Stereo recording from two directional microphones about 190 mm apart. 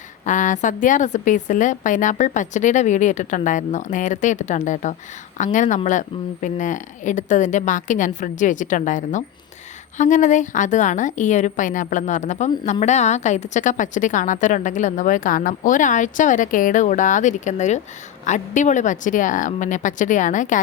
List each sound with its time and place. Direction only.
0.3 s a woman's voice: 40° left (ahead or behind)